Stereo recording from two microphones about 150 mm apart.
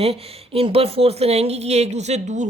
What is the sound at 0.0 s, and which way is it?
A woman's voice, 40° right (ahead or behind).